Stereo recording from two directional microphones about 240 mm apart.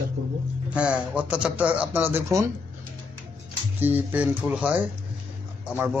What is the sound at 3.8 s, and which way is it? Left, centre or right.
A man's voice, centre.